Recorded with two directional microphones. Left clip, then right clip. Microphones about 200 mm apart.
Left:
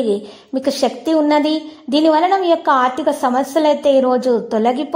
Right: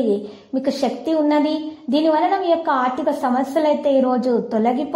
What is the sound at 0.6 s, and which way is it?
A woman's voice, 25° left (ahead or behind).